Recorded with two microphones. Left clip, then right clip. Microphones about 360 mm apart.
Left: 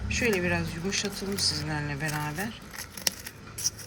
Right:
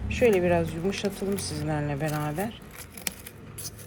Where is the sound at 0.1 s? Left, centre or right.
Centre.